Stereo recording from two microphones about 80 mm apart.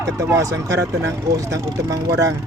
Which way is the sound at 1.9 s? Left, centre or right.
Right.